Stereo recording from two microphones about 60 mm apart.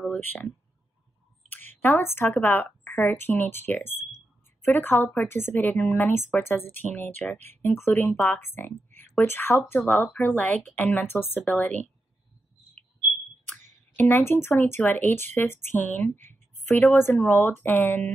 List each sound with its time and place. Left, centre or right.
0.0 s a sound: left
1.5 s speech: left
5.8 s speech: left
7.6 s speech: left
11.4 s speech: left
14.0 s speech: left